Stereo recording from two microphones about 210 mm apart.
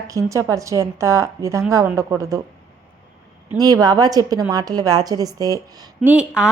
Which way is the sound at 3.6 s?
15° right (ahead or behind).